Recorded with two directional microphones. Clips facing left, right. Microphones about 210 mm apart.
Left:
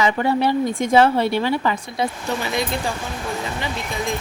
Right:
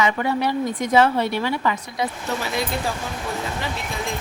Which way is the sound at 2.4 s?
5° right (ahead or behind).